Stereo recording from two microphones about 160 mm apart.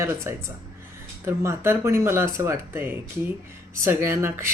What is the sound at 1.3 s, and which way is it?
Speech, 15° right (ahead or behind).